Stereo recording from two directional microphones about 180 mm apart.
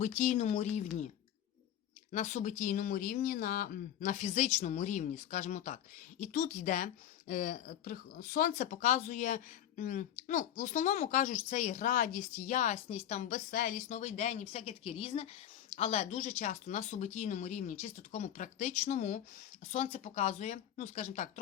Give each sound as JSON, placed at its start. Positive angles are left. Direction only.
{"t": 0.2, "sound": "speech", "side_deg": 40}
{"t": 2.1, "sound": "speech", "side_deg": 40}